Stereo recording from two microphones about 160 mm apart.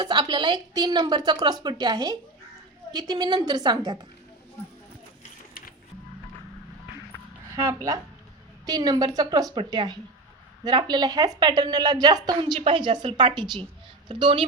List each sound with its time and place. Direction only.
0.0 s a woman's voice: 30° right (ahead or behind)
7.5 s a woman's voice: 20° right (ahead or behind)